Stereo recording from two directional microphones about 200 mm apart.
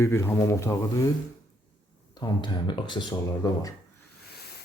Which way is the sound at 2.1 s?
20° left (ahead or behind).